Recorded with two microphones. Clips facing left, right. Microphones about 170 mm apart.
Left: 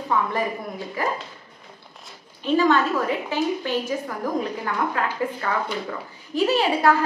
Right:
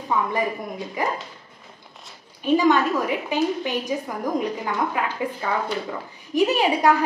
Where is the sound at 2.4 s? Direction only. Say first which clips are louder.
Right 1 dB; 15° right (ahead or behind).